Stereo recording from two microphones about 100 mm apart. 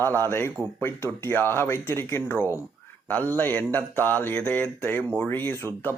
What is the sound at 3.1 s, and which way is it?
Mantra, 20° left (ahead or behind).